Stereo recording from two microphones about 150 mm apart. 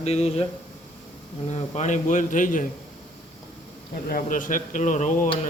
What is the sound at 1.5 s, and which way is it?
A man's voice, 50° left (ahead or behind).